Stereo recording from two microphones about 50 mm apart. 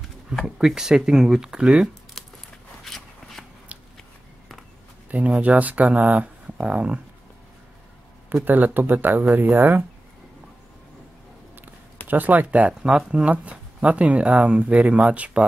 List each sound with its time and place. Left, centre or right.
0.6 s speech: centre
2.8 s walk: centre
3.7 s a sound: right
5.1 s speech: right
8.5 s speech: right
12.1 s speech: right